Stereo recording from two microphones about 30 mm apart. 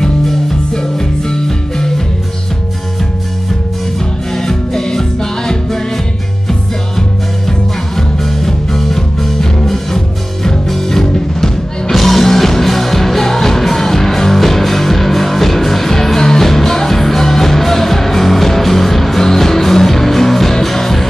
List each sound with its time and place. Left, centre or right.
0.0 s music: centre
4.4 s music: centre
7.0 s music: centre